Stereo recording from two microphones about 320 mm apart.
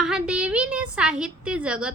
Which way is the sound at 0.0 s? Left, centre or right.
Centre.